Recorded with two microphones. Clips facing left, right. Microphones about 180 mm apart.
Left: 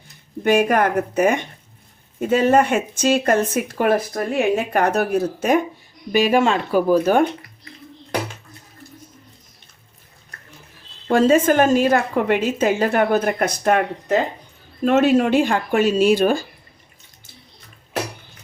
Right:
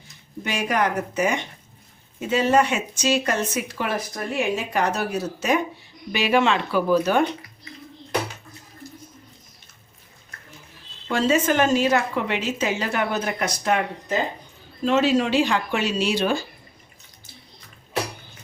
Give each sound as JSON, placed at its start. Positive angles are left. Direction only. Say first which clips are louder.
{"t": 0.4, "sound": "speech", "louder": "left 7 dB", "side_deg": 55}
{"t": 11.1, "sound": "speech", "louder": "left 6 dB", "side_deg": 50}